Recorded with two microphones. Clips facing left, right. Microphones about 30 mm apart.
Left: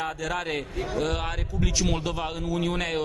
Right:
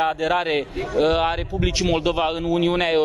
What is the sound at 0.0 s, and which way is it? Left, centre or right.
A man's voice, right.